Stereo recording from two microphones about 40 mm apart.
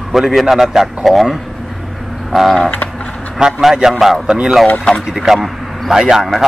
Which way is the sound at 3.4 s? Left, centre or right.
Centre.